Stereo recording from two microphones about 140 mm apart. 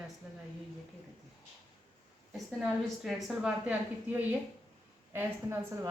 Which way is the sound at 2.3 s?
Centre (ahead or behind).